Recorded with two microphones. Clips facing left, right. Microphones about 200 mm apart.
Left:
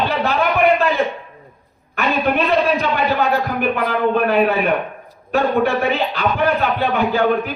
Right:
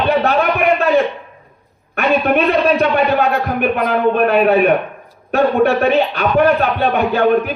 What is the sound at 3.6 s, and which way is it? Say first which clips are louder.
Speech: right 3 dB; 60° right (ahead or behind).